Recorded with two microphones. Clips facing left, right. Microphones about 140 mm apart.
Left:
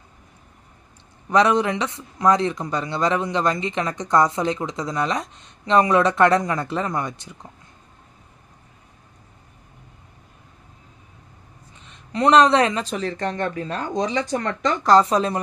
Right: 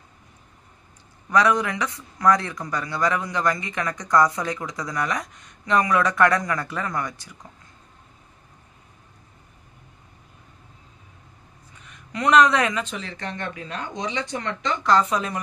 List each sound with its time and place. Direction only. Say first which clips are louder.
1.3 s speech: left 3 dB; 25° left (ahead or behind)
11.8 s speech: left 5 dB; 30° left (ahead or behind)